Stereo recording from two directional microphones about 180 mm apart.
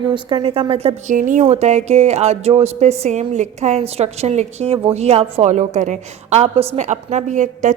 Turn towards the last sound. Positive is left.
turn(degrees=-45)  # may be behind; listen again after turning